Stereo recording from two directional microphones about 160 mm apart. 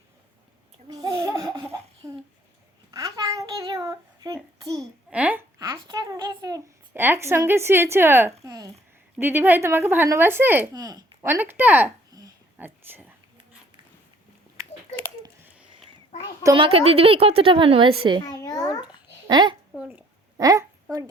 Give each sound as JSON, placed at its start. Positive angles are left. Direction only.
{"t": 1.2, "sound": "laughter", "side_deg": -20}
{"t": 2.0, "sound": "a sound", "side_deg": -20}
{"t": 4.6, "sound": "a child's voice", "side_deg": -25}
{"t": 5.1, "sound": "a woman's voice", "side_deg": -10}
{"t": 5.5, "sound": "a sound", "side_deg": -20}
{"t": 9.1, "sound": "speech", "side_deg": -10}
{"t": 10.8, "sound": "speech", "side_deg": -25}
{"t": 12.5, "sound": "whispering", "side_deg": -10}
{"t": 16.6, "sound": "a woman's voice", "side_deg": -35}
{"t": 18.4, "sound": "babbling", "side_deg": 25}
{"t": 19.3, "sound": "a child's voice", "side_deg": -25}
{"t": 19.8, "sound": "a woman's voice", "side_deg": -10}
{"t": 20.4, "sound": "a child's voice", "side_deg": -20}